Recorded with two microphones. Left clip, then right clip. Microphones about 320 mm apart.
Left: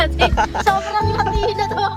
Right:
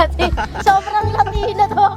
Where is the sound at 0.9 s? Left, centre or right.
Right.